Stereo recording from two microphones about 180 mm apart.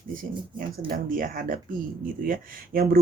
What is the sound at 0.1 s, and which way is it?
Speech, 50° right (ahead or behind).